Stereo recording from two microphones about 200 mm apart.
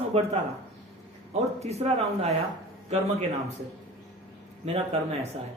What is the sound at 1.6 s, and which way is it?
Speech, 30° right (ahead or behind).